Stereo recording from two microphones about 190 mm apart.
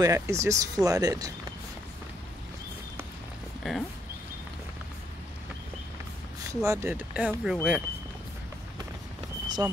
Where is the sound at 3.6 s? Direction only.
Centre (ahead or behind).